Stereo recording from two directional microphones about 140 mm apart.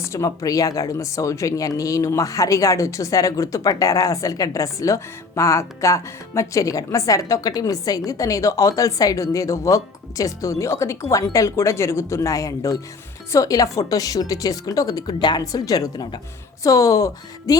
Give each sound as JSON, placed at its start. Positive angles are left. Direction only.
{"t": 0.0, "sound": "speech", "side_deg": 20}